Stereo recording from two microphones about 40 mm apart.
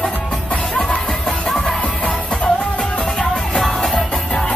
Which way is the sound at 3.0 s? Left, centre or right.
Centre.